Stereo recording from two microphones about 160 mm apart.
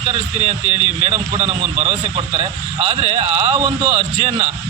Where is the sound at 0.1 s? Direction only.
40° right (ahead or behind).